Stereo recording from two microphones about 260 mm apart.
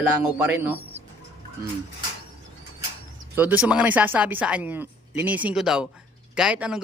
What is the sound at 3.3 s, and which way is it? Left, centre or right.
Speech, centre.